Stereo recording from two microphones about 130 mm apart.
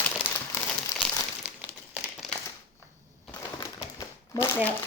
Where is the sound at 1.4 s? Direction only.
15° right (ahead or behind).